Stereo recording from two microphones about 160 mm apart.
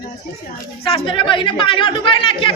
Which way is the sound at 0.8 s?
35° left (ahead or behind).